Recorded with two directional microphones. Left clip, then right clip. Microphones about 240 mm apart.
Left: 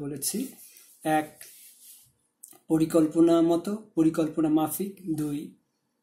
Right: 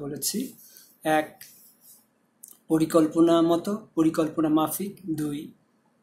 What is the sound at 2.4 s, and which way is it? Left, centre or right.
Speech, centre.